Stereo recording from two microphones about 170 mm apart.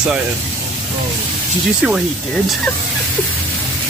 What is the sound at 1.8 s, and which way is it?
Speech, centre (ahead or behind).